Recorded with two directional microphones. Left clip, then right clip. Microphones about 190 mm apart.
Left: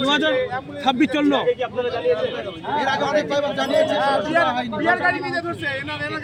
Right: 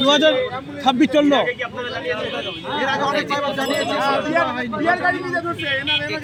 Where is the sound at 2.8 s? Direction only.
35° left (ahead or behind).